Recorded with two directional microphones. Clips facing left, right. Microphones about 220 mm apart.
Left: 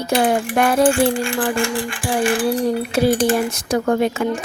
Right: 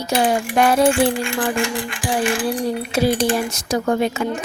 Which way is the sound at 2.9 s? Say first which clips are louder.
Left 1 dB; 50° left (ahead or behind).